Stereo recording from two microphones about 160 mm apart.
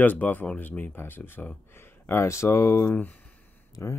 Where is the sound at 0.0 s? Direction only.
10° left (ahead or behind).